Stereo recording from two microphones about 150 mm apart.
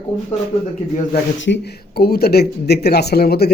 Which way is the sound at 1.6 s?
90° left.